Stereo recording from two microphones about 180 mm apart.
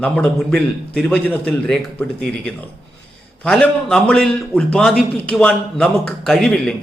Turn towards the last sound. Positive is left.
turn(degrees=5)  # may be behind; listen again after turning